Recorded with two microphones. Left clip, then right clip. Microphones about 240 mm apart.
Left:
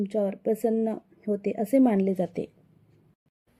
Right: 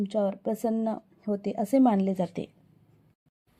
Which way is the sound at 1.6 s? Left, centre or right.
Centre.